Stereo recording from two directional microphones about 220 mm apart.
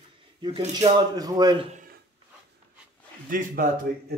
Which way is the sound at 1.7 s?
40° right (ahead or behind).